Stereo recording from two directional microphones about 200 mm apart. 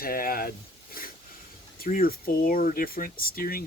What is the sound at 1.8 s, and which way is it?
Speech, 45° left (ahead or behind).